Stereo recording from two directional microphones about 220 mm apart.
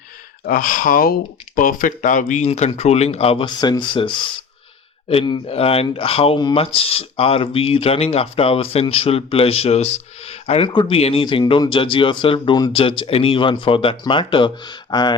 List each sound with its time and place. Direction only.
0.4 s speech: 40° left (ahead or behind); by 15.1 s 20° left (ahead or behind)